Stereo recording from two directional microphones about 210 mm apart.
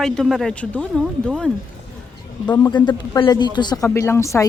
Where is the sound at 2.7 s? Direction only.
20° left (ahead or behind).